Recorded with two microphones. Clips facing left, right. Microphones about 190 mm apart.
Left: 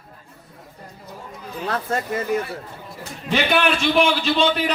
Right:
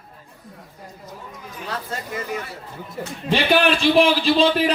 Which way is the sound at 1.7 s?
50° left (ahead or behind).